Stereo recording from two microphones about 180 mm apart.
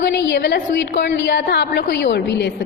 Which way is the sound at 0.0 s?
75° left (ahead or behind).